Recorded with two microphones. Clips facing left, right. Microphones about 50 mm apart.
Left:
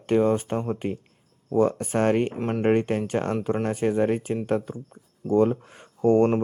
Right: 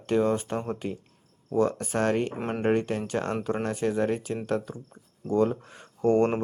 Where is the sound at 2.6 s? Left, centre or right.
Left.